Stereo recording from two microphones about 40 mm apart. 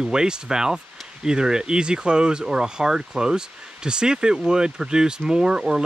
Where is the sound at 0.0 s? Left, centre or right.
Centre.